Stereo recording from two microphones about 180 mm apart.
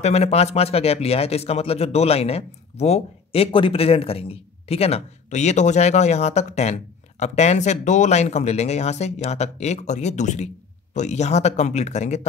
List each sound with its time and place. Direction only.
0.0 s speech: 35° left (ahead or behind)